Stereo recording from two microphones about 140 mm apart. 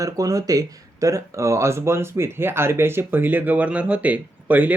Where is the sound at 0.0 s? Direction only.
25° right (ahead or behind).